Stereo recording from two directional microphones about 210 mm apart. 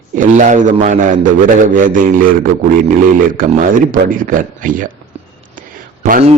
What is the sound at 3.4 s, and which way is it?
A man's voice, 40° right (ahead or behind).